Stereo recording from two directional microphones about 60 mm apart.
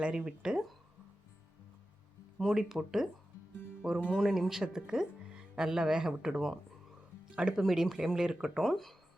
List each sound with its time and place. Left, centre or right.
0.0 s speech: centre
2.4 s speech: centre
4.1 s speech: centre
8.6 s speech: centre